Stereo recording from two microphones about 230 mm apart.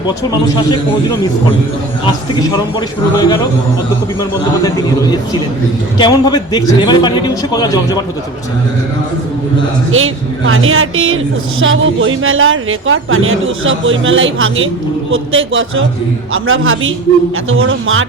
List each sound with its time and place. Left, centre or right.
3.2 s a man's voice: centre
6.0 s a man's voice: centre
9.9 s a woman's voice: right